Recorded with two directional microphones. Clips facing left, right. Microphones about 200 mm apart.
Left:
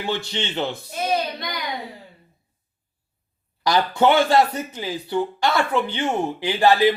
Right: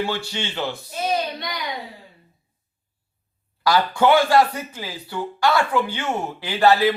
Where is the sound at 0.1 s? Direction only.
20° left (ahead or behind).